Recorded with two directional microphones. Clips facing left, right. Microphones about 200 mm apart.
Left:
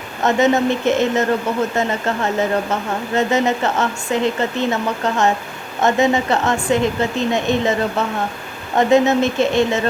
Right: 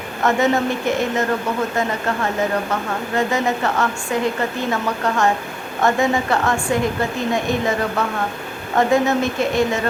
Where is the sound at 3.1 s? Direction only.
25° left (ahead or behind).